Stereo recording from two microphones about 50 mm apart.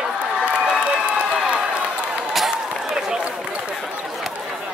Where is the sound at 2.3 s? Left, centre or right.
Centre.